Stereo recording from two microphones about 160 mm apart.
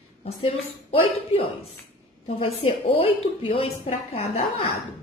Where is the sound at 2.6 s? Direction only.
35° left (ahead or behind).